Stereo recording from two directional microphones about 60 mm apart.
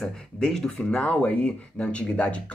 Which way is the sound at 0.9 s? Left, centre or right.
Left.